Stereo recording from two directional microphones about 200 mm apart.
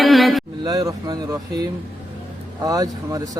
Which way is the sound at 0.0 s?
Centre (ahead or behind).